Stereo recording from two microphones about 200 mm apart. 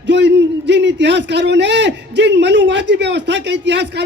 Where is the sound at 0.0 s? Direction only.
60° right (ahead or behind).